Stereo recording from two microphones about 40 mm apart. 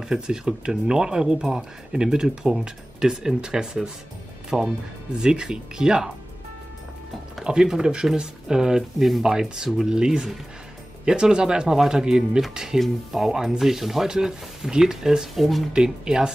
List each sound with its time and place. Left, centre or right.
0.1 s speech: right
7.4 s speech: centre
15.3 s speech: centre
15.7 s speech: centre